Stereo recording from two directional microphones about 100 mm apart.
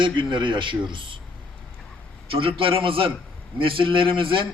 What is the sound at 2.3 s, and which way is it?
A man's voice, 65° right (ahead or behind).